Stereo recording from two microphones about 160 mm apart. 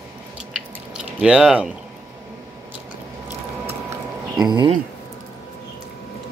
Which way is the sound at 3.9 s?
25° right (ahead or behind).